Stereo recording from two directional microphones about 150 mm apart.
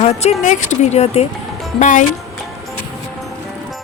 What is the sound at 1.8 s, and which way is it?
Speech, 55° left (ahead or behind).